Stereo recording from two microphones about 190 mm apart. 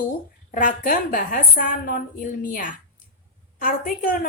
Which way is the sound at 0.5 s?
45° left (ahead or behind).